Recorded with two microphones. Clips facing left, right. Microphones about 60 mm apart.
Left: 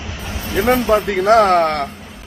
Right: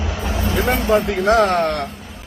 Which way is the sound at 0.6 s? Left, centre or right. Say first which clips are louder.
Left 3 dB; left.